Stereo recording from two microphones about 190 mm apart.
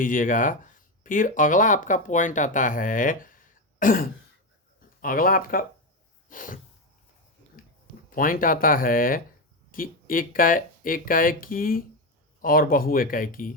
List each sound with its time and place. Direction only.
0.0 s speech: 45° left (ahead or behind)
5.0 s speech: 50° left (ahead or behind)
6.2 s sneeze: 45° left (ahead or behind)
8.1 s speech: 45° left (ahead or behind)